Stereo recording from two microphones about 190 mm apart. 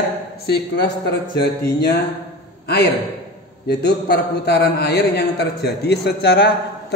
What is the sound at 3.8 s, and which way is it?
A man's voice, 55° left (ahead or behind).